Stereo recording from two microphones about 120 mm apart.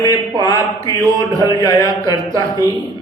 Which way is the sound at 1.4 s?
30° left (ahead or behind).